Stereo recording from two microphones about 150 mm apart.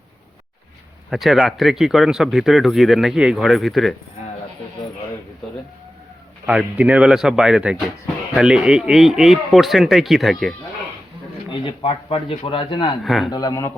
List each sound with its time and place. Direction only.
1.1 s speech: centre (ahead or behind)
6.5 s speech: 5° right (ahead or behind)
11.5 s speech: 35° left (ahead or behind)
13.0 s speech: centre (ahead or behind)
13.3 s speech: 25° left (ahead or behind)